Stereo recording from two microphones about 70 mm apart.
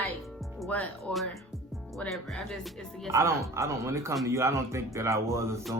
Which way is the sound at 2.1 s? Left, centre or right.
Centre.